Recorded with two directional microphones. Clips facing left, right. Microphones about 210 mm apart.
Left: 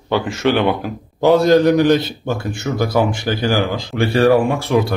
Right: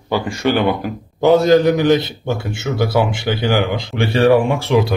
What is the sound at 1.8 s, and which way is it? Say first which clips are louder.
Speech: even; 20° right (ahead or behind).